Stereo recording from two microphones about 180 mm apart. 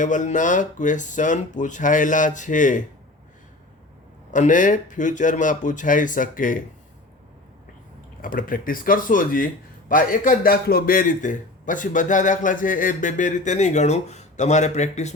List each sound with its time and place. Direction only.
0.0 s a man's voice: 45° left (ahead or behind)
4.3 s a man's voice: 45° left (ahead or behind)
8.2 s a man's voice: 50° left (ahead or behind)